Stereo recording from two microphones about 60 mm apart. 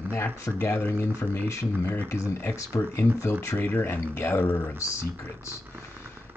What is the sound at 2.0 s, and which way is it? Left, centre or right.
Speech, left.